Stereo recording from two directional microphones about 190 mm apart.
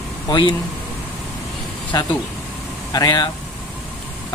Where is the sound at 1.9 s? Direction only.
20° left (ahead or behind).